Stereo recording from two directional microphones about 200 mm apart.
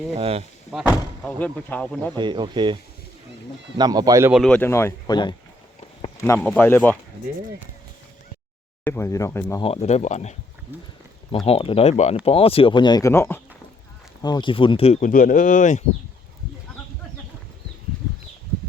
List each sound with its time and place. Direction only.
0.2 s speech: 30° right (ahead or behind)
0.7 s speech: 5° right (ahead or behind)
1.4 s speech: 5° left (ahead or behind)
2.1 s speech: 25° right (ahead or behind)
3.8 s speech: 20° right (ahead or behind)
4.3 s speech: centre (ahead or behind)
8.8 s speech: 10° left (ahead or behind)
9.6 s speech: 30° left (ahead or behind)